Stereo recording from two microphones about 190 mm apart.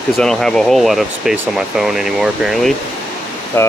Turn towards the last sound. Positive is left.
turn(degrees=10)  # may be behind; listen again after turning